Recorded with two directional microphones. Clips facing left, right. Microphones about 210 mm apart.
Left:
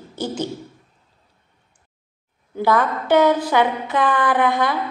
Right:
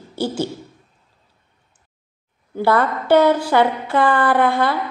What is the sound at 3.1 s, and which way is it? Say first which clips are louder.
A woman's voice: right 1 dB; 10° right (ahead or behind).